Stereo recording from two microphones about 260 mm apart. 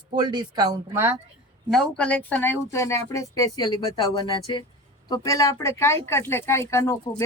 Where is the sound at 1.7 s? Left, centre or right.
Centre.